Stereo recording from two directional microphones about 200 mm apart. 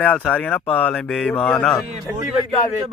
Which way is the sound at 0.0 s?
5° left (ahead or behind).